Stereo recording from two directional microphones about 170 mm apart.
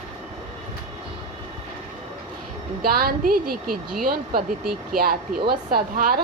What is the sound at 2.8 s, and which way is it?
A woman's voice, 60° right (ahead or behind).